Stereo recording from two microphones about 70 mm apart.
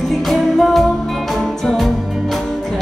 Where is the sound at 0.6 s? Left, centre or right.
Centre.